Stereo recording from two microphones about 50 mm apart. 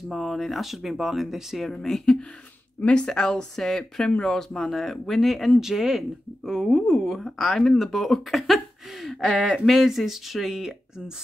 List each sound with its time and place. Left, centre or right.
0.1 s speech: centre
1.7 s speech: centre
2.8 s speech: left; by 8.5 s centre
9.0 s speech: centre